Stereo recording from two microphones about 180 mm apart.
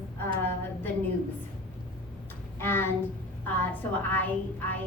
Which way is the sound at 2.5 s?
10° left (ahead or behind).